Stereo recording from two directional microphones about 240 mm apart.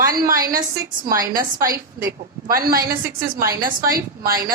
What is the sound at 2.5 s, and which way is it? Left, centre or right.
A woman's voice, right.